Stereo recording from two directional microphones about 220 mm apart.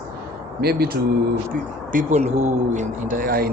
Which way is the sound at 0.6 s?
45° right (ahead or behind).